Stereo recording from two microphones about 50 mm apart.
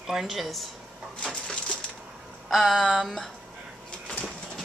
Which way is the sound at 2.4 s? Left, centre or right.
Centre.